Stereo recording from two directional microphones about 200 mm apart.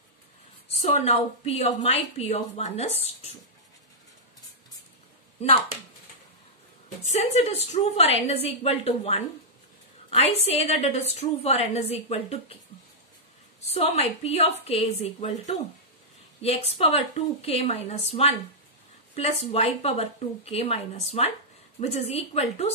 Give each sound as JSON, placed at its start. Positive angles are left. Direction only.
{"t": 0.7, "sound": "a woman's voice", "side_deg": 30}
{"t": 7.0, "sound": "a woman's voice", "side_deg": 35}
{"t": 13.7, "sound": "a woman's voice", "side_deg": 30}